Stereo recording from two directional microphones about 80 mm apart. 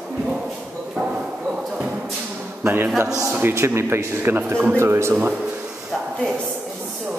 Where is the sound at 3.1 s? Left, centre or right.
Right.